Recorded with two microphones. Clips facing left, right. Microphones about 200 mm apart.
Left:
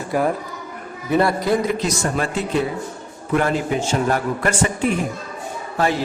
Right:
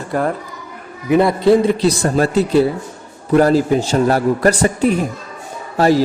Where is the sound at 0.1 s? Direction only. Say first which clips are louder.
Right 1 dB; 15° left (ahead or behind).